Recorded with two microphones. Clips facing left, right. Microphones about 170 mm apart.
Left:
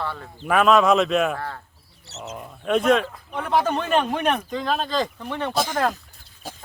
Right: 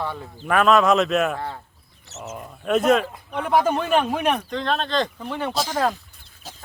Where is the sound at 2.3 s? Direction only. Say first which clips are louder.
Right 1 dB; centre (ahead or behind).